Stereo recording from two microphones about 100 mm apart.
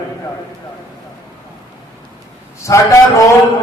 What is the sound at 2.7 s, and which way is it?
Speech, 35° left (ahead or behind).